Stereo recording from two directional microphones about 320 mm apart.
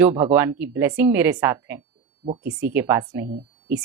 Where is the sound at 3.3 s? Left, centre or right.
Right.